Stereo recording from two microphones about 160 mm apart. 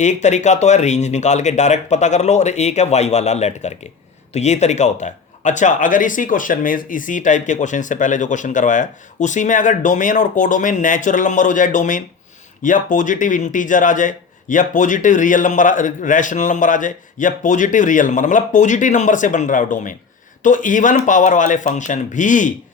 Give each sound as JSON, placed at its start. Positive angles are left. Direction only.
{"t": 0.0, "sound": "speech", "side_deg": 45}